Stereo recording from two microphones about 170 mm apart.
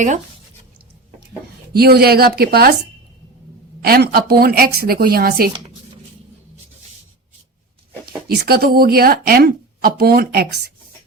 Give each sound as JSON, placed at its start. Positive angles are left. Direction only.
{"t": 1.7, "sound": "speech", "side_deg": -65}
{"t": 3.8, "sound": "speech", "side_deg": -65}
{"t": 8.3, "sound": "speech", "side_deg": -65}